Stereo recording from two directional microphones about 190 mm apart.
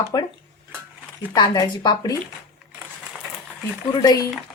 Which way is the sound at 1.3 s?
20° left (ahead or behind).